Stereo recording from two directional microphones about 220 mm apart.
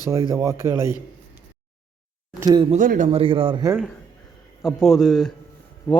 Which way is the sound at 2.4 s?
20° right (ahead or behind).